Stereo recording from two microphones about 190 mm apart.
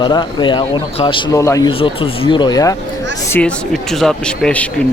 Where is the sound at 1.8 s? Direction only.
30° left (ahead or behind).